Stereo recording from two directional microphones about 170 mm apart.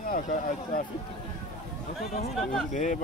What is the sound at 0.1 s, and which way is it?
Speech, 50° left (ahead or behind).